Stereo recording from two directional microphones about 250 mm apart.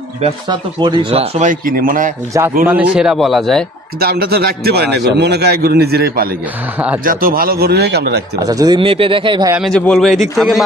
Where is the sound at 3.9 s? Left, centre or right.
Right.